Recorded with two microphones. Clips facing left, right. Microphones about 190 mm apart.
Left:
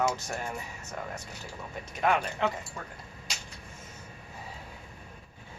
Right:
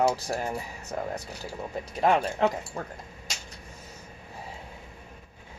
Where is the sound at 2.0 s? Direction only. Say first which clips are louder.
Right 4 dB; 35° right (ahead or behind).